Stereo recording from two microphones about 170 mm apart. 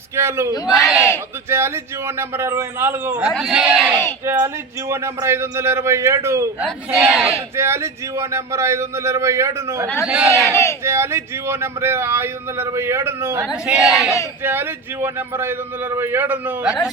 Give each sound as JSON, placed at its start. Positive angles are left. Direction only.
{"t": 0.2, "sound": "speech", "side_deg": -15}
{"t": 0.7, "sound": "speech", "side_deg": 0}
{"t": 1.5, "sound": "speech", "side_deg": -15}
{"t": 6.7, "sound": "speech", "side_deg": 0}
{"t": 7.5, "sound": "speech", "side_deg": -15}
{"t": 10.5, "sound": "speech", "side_deg": 15}
{"t": 10.8, "sound": "speech", "side_deg": -15}